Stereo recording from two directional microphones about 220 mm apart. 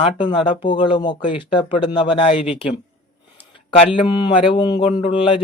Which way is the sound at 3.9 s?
20° left (ahead or behind).